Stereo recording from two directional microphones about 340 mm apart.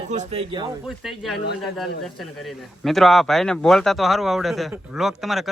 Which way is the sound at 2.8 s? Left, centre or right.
Centre.